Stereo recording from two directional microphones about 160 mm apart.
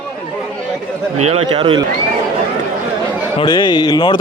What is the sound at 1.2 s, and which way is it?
Speech, 35° right (ahead or behind).